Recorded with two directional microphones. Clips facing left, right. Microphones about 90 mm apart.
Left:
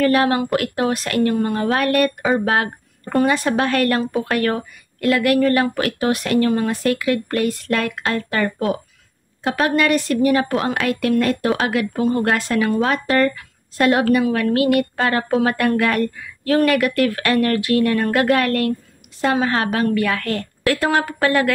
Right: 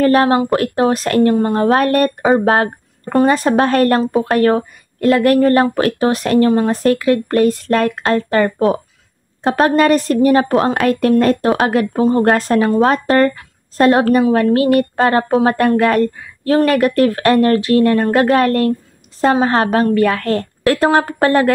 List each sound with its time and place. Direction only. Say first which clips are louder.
0.0 s a woman's voice: right 4 dB; 35° right (ahead or behind)